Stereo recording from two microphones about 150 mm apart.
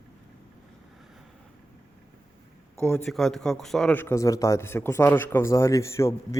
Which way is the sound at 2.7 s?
15° left (ahead or behind).